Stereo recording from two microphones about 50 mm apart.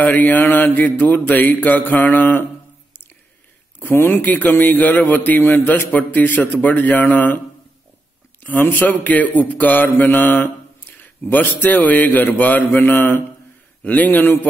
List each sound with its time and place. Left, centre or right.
0.0 s a man's voice: left
3.8 s speech: left
4.2 s a man's voice: left
8.5 s a man's voice: left